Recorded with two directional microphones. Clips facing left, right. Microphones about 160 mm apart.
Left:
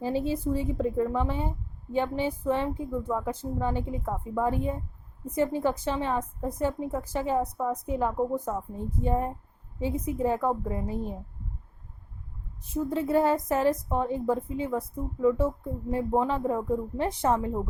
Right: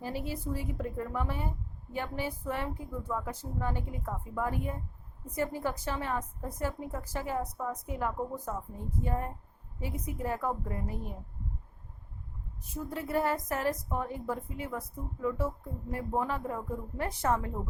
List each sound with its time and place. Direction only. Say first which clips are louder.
0.0 s a woman's voice: left 8 dB; 25° left (ahead or behind)
12.6 s a woman's voice: left 9 dB; 25° left (ahead or behind)